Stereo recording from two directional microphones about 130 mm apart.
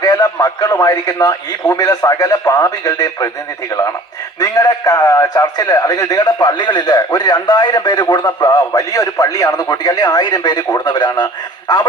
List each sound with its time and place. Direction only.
0.0 s a man's voice: 30° left (ahead or behind)
4.4 s a man's voice: 30° left (ahead or behind)